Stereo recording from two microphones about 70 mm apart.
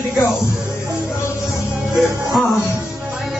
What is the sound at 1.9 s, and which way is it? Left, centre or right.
Music, centre.